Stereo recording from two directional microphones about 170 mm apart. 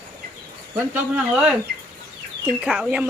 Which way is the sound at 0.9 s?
5° right (ahead or behind).